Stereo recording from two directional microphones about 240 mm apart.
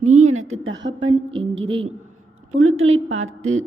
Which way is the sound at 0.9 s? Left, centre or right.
Right.